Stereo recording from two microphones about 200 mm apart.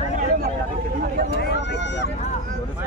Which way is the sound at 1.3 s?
60° left (ahead or behind).